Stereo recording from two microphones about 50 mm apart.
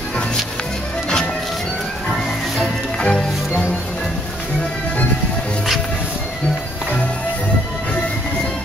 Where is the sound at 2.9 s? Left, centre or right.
Centre.